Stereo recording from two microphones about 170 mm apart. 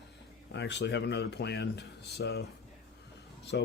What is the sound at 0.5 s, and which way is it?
Speech, 90° left.